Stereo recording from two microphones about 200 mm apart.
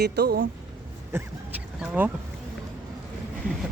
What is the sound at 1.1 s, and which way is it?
Speech, 10° right (ahead or behind).